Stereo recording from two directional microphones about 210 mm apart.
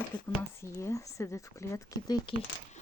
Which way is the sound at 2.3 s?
25° left (ahead or behind).